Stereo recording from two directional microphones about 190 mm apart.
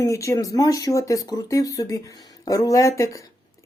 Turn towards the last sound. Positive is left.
turn(degrees=15)  # may be behind; listen again after turning